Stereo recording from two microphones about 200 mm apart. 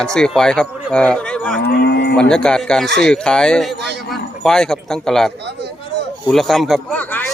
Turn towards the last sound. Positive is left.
turn(degrees=10)  # may be behind; listen again after turning